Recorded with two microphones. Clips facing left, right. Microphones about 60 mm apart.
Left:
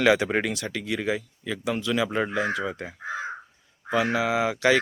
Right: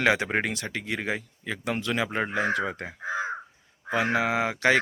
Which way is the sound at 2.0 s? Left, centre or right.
Right.